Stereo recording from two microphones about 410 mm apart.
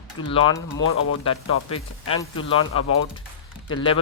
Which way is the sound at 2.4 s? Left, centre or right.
Centre.